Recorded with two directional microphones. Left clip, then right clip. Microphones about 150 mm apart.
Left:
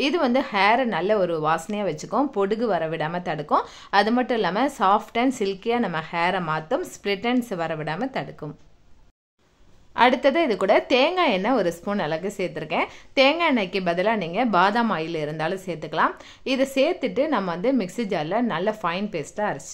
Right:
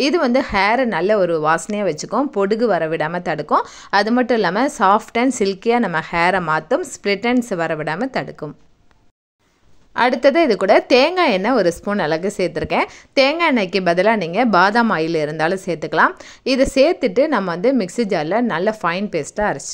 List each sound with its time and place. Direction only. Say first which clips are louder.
0.0 s a woman's voice: right 5 dB; 35° right (ahead or behind)
9.9 s a woman's voice: right 4 dB; 35° right (ahead or behind)